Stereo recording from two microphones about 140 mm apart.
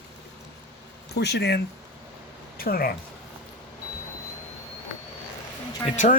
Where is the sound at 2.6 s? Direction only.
90° left.